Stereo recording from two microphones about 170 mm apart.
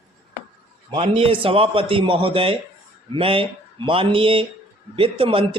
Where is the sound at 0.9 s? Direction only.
30° right (ahead or behind).